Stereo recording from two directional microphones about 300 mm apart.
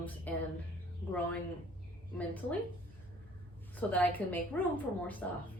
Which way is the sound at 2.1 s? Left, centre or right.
Centre.